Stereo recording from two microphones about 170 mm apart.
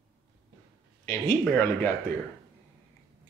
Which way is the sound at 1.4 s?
15° left (ahead or behind).